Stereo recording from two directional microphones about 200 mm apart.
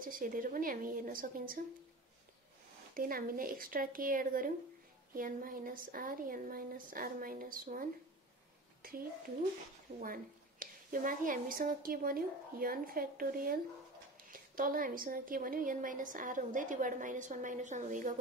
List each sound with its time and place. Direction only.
0.0 s a woman's voice: 45° right (ahead or behind)
3.0 s a woman's voice: 45° right (ahead or behind)
8.8 s a child's voice: 45° right (ahead or behind)